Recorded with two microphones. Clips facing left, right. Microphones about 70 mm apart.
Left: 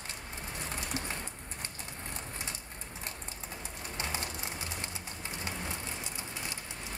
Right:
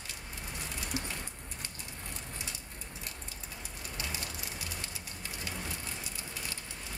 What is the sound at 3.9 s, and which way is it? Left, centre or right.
Bird, left.